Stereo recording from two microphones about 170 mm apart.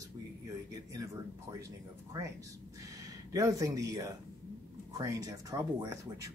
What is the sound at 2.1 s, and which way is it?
Speech, 20° right (ahead or behind).